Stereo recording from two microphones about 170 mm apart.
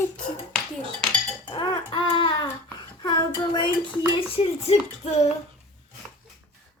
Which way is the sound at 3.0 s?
25° left (ahead or behind).